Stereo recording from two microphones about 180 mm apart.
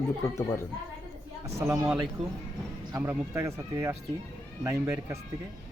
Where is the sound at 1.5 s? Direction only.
15° right (ahead or behind).